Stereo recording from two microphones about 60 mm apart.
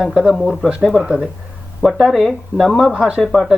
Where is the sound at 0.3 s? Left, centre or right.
Centre.